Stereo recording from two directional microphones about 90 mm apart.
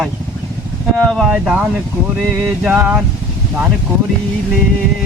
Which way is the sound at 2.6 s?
15° right (ahead or behind).